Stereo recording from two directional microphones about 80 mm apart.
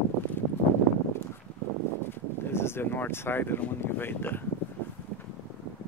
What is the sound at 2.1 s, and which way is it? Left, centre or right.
Speech, left.